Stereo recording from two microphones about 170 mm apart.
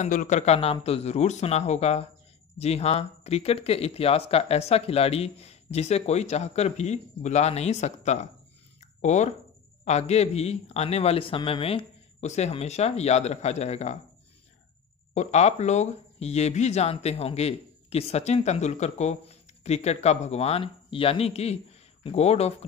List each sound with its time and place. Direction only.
0.0 s speech: 50° left (ahead or behind)
15.1 s speech: 40° left (ahead or behind)